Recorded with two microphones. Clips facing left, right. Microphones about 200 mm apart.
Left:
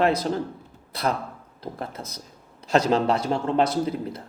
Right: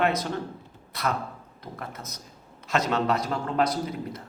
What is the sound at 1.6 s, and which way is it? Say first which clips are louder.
A man's voice: left 5 dB; 30° left (ahead or behind).